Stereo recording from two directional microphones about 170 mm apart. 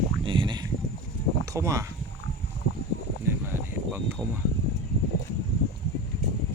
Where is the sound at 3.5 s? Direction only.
15° right (ahead or behind).